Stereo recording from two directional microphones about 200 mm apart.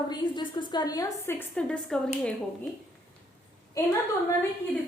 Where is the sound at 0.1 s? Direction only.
20° left (ahead or behind); by 2.3 s 5° left (ahead or behind).